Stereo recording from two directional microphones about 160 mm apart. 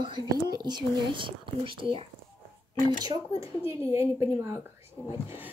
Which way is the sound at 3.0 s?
20° right (ahead or behind).